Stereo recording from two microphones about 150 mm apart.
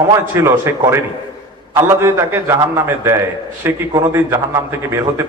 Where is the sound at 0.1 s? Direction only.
15° right (ahead or behind).